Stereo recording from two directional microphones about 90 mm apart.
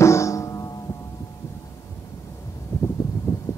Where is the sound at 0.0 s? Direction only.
35° left (ahead or behind).